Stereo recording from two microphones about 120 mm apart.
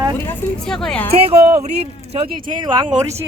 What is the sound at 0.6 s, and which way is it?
Speech, 5° left (ahead or behind).